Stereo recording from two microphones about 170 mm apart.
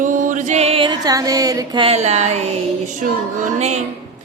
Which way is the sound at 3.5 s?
40° right (ahead or behind).